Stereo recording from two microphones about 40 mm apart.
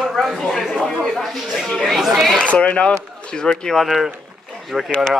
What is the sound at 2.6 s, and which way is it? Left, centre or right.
Speech, left.